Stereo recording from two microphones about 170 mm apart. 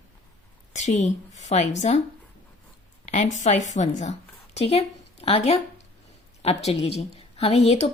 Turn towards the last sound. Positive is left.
turn(degrees=40)  # may be behind; listen again after turning